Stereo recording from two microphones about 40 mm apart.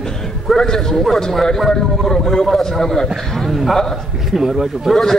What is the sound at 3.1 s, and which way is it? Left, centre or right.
A man's voice, centre.